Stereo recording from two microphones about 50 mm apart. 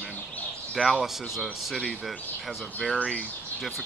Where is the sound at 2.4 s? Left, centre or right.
Centre.